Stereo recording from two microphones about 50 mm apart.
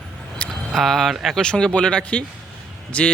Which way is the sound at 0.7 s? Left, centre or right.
Centre.